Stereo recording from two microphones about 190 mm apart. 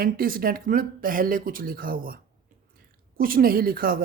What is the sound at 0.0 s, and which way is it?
A woman's voice, 50° right (ahead or behind).